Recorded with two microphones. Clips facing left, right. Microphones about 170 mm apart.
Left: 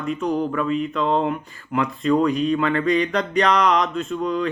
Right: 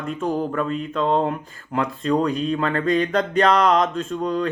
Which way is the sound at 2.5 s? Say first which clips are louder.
Left 1 dB; 45° right (ahead or behind).